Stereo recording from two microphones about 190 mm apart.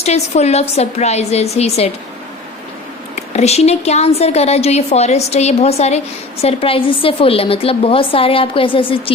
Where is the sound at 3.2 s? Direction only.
35° left (ahead or behind).